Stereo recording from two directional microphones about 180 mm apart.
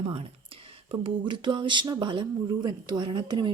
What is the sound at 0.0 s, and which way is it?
Speech, 30° right (ahead or behind).